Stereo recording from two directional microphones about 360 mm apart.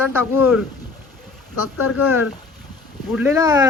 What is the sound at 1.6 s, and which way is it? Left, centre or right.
Speech, left.